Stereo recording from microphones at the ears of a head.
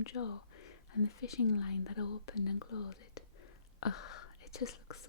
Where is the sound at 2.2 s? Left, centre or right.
Left.